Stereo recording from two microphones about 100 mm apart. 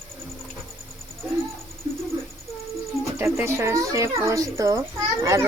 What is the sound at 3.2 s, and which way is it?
Speech, 25° right (ahead or behind).